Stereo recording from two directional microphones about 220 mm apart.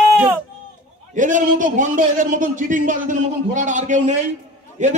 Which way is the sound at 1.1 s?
35° right (ahead or behind).